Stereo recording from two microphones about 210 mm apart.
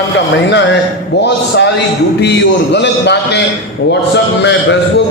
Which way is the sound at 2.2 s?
55° left (ahead or behind).